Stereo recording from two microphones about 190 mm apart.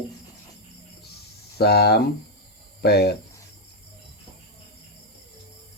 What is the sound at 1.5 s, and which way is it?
Speech, 55° left (ahead or behind).